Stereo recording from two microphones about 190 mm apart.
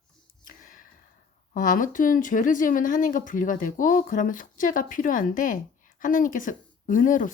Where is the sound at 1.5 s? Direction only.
45° left (ahead or behind).